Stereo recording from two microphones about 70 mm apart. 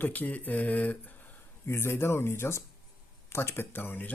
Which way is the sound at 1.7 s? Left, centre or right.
Left.